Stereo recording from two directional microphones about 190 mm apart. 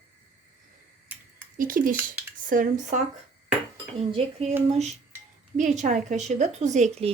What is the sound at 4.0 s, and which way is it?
Speech, 30° right (ahead or behind).